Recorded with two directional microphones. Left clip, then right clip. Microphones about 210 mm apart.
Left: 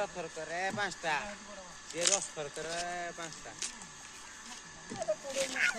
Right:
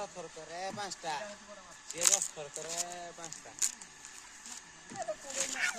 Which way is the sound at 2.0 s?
45° right (ahead or behind).